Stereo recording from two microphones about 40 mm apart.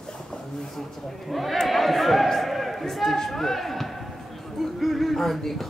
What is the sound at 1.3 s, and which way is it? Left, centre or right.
A man's voice, centre.